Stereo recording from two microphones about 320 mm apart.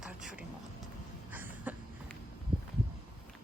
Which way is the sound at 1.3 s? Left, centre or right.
Centre.